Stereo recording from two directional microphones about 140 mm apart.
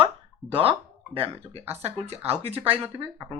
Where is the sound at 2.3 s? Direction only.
45° right (ahead or behind).